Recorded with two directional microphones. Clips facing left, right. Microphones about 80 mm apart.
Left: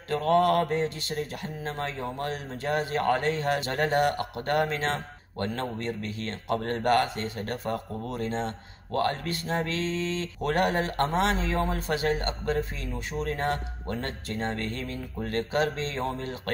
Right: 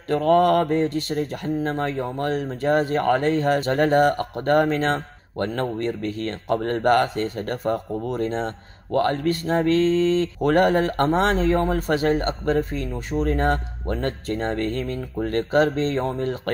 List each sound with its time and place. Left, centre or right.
0.1 s speech: right